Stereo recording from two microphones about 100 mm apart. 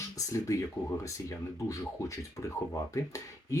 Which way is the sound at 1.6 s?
35° left (ahead or behind).